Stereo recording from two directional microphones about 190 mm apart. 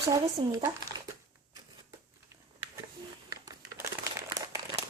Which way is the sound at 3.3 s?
20° right (ahead or behind).